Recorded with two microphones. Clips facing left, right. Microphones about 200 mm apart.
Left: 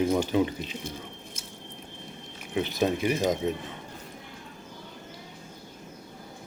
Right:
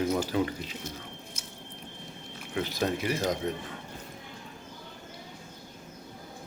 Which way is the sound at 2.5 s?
20° left (ahead or behind).